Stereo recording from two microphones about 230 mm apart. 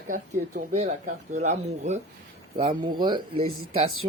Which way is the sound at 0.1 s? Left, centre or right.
Right.